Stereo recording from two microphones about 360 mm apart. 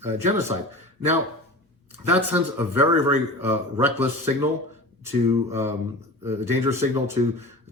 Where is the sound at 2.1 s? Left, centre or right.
Centre.